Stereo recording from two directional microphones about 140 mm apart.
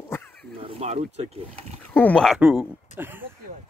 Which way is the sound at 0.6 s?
45° right (ahead or behind).